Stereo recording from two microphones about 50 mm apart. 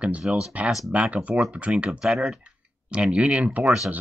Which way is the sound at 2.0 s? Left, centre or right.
Centre.